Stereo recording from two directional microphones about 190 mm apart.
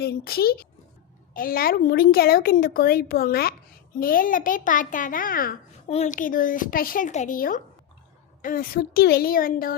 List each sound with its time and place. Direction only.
0.0 s a child's voice: 55° left (ahead or behind)